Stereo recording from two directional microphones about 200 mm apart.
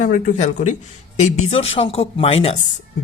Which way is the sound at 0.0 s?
40° left (ahead or behind).